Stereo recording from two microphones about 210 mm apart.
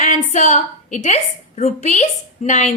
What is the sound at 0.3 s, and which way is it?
A woman's voice, 35° left (ahead or behind).